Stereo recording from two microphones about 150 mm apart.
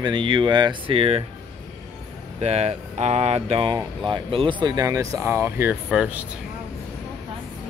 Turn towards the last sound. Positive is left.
turn(degrees=-10)  # may be behind; listen again after turning